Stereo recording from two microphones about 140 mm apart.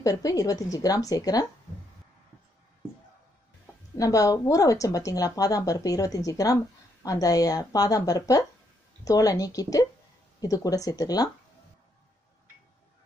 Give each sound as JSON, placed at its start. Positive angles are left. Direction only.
{"t": 0.0, "sound": "a woman's voice", "side_deg": 25}
{"t": 3.9, "sound": "a woman's voice", "side_deg": 25}